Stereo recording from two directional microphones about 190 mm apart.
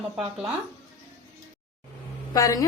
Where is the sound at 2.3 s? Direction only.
20° left (ahead or behind).